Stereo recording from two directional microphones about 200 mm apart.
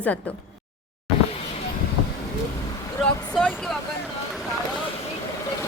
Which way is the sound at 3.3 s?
5° left (ahead or behind).